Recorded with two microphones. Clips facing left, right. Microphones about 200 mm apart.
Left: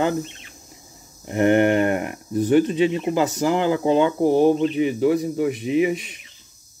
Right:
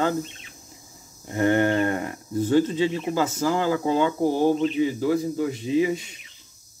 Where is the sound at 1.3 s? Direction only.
20° left (ahead or behind).